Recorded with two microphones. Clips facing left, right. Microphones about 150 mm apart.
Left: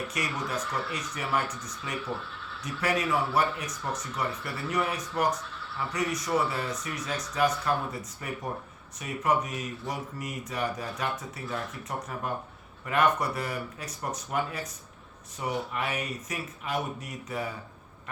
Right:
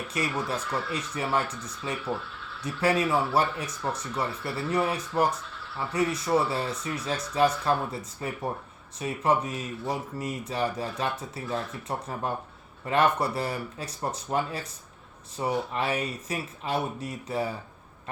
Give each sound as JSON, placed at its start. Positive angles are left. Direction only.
{"t": 0.1, "sound": "speech", "side_deg": -30}